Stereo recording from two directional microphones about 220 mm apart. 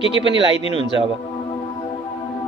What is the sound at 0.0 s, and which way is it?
A man's voice, 25° left (ahead or behind).